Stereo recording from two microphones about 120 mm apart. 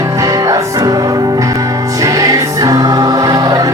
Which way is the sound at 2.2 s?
30° right (ahead or behind).